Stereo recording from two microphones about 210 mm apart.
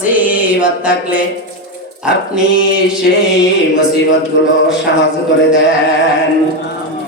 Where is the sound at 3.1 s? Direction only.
55° left (ahead or behind).